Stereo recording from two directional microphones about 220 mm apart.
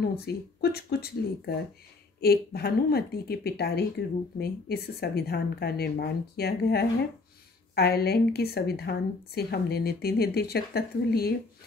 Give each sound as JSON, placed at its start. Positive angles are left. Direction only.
{"t": 0.2, "sound": "a woman's voice", "side_deg": 45}